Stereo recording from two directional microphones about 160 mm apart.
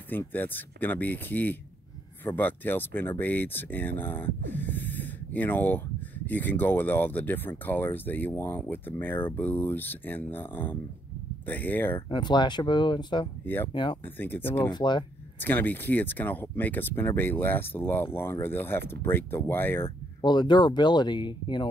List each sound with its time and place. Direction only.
0.1 s speech: 10° left (ahead or behind)
12.1 s speech: 30° left (ahead or behind)
14.0 s speech: 10° left (ahead or behind)
14.7 s speech: 30° left (ahead or behind)
15.3 s speech: 10° left (ahead or behind)
20.2 s speech: 25° left (ahead or behind)